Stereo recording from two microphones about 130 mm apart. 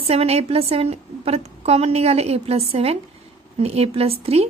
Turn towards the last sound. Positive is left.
turn(degrees=-50)  # may be behind; listen again after turning